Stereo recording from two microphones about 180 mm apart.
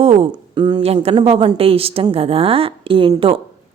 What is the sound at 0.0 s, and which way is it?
A woman's voice, 35° right (ahead or behind).